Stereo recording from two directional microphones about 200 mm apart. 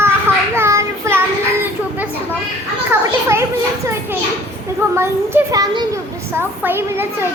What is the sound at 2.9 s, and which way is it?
Speech, 15° right (ahead or behind).